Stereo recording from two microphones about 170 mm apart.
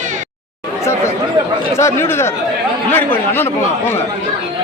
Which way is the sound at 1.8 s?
15° left (ahead or behind).